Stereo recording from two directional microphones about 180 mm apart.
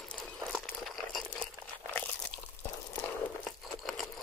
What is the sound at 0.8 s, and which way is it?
Crumpling, centre (ahead or behind).